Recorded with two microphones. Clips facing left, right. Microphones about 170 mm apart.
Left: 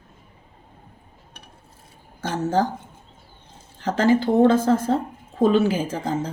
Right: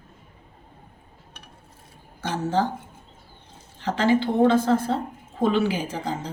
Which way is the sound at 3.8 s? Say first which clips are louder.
Left 2 dB; 45° left (ahead or behind).